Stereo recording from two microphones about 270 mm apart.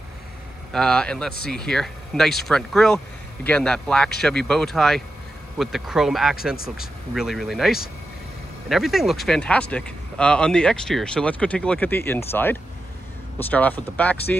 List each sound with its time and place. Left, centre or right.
0.7 s speech: centre